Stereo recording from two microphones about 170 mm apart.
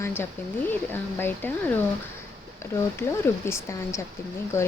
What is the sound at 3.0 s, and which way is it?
Speech, 15° left (ahead or behind).